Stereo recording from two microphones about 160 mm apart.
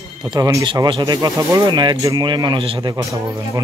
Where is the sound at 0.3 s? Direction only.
20° right (ahead or behind).